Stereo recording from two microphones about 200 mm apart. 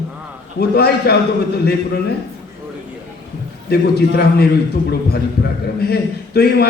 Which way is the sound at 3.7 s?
55° left (ahead or behind).